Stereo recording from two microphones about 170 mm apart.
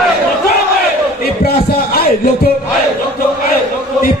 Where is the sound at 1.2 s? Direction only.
65° left (ahead or behind).